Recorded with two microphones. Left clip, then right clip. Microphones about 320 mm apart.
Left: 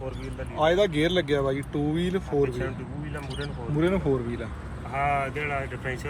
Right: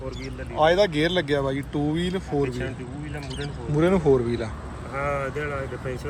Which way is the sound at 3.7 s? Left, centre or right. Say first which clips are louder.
Right 5 dB; centre.